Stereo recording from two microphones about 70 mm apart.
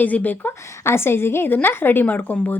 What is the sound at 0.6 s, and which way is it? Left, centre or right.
A woman's voice, left.